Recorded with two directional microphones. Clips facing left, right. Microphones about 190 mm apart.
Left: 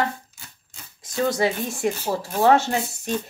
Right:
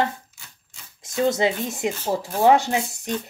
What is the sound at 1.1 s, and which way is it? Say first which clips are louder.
Speech: right 1 dB; 25° right (ahead or behind).